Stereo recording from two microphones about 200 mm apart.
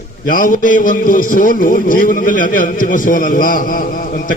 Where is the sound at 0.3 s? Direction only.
45° left (ahead or behind).